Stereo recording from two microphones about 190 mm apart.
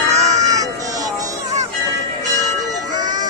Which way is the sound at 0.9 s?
20° right (ahead or behind).